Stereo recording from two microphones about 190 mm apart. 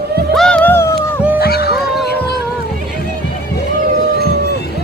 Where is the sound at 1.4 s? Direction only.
55° left (ahead or behind).